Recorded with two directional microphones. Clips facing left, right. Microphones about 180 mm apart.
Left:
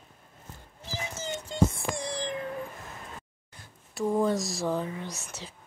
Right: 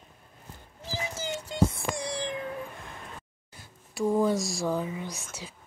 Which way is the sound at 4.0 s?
Centre (ahead or behind).